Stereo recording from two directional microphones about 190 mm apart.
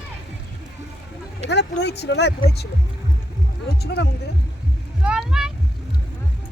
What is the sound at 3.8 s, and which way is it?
Speech, 60° left (ahead or behind).